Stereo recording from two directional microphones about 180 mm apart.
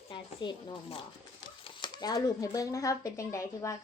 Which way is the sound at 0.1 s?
30° left (ahead or behind).